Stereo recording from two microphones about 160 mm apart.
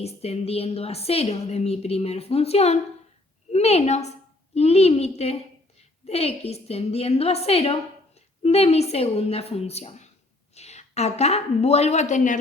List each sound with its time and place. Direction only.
0.0 s a woman's voice: 40° left (ahead or behind)